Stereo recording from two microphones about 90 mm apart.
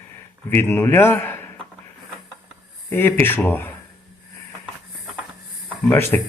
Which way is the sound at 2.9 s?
25° left (ahead or behind).